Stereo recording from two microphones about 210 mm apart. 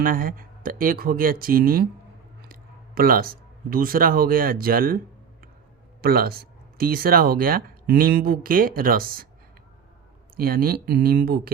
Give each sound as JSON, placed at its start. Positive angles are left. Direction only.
{"t": 0.0, "sound": "speech", "side_deg": -40}
{"t": 6.0, "sound": "speech", "side_deg": -45}
{"t": 10.3, "sound": "speech", "side_deg": -45}